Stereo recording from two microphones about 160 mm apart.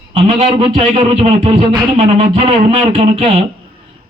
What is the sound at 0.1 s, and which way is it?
A man's voice, 40° right (ahead or behind).